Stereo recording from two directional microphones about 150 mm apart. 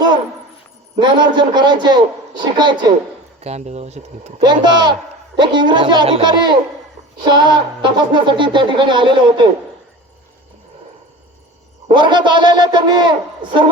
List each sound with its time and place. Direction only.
0.9 s a man's voice: 30° right (ahead or behind)
3.4 s speech: 45° right (ahead or behind)
4.4 s a man's voice: 30° right (ahead or behind)
11.9 s speech: 30° right (ahead or behind)